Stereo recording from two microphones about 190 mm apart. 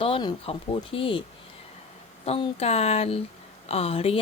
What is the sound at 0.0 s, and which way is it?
Speech, 25° left (ahead or behind).